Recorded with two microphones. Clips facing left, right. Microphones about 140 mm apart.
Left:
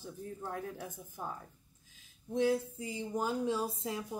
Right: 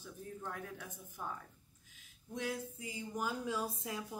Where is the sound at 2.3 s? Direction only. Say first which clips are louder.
Left 10 dB; 30° left (ahead or behind).